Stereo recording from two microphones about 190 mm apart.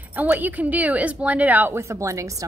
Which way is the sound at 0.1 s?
10° right (ahead or behind).